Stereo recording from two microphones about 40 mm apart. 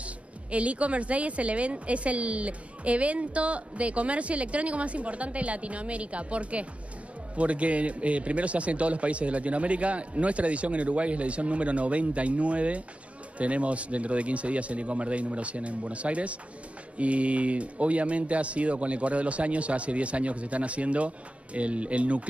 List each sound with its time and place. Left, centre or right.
0.0 s speech: right